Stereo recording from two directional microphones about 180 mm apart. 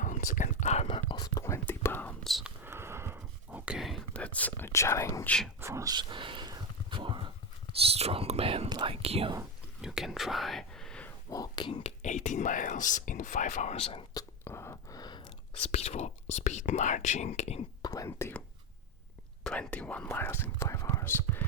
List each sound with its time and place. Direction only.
0.0 s whispering: 45° left (ahead or behind); by 2.5 s centre (ahead or behind)
2.6 s a sound: 15° right (ahead or behind); by 5.3 s 15° left (ahead or behind)
5.5 s a sound: 15° right (ahead or behind)
7.8 s speech: 35° right (ahead or behind)
9.8 s whispering: centre (ahead or behind)
11.3 s whispering: 20° left (ahead or behind)
11.7 s speech: 40° left (ahead or behind)
14.1 s whispering: 20° left (ahead or behind)
15.6 s speech: 35° left (ahead or behind)
17.8 s whispering: 20° left (ahead or behind)
19.5 s speech: 5° left (ahead or behind)